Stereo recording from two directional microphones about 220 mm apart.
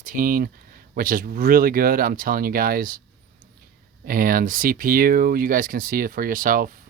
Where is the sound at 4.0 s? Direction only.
40° right (ahead or behind).